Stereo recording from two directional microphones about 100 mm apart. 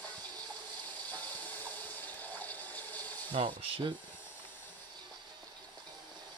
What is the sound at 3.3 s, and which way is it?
Speech, 55° right (ahead or behind).